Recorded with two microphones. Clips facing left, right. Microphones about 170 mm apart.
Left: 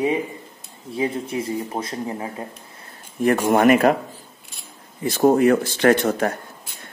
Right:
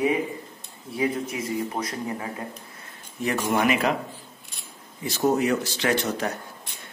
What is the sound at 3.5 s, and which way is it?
Speech, 50° left (ahead or behind).